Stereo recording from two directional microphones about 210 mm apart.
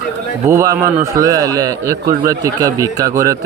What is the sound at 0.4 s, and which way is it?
Speech, 15° right (ahead or behind).